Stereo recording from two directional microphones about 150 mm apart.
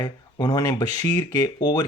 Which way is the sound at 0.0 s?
25° left (ahead or behind).